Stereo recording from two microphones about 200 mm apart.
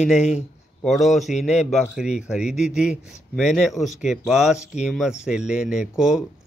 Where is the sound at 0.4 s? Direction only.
Centre (ahead or behind).